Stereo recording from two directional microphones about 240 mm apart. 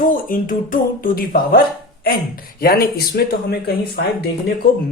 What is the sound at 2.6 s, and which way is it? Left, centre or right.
Speech, left.